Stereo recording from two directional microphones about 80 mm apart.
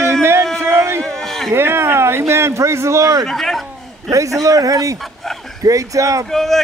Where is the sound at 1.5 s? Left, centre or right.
Right.